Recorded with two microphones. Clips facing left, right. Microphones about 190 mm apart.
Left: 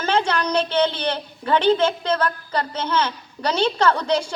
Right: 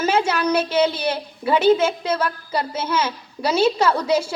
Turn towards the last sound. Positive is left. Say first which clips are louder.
# right 1 dB
turn(degrees=-10)  # may be behind; listen again after turning